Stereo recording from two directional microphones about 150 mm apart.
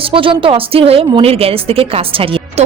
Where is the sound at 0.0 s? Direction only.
35° right (ahead or behind).